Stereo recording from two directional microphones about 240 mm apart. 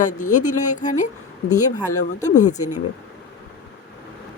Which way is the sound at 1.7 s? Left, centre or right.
Centre.